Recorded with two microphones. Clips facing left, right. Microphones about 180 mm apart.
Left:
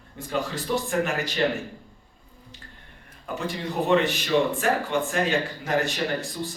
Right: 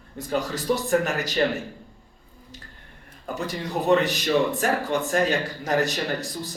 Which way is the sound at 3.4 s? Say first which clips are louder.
Even; 40° right (ahead or behind).